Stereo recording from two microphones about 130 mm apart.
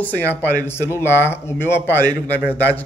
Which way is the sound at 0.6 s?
20° left (ahead or behind).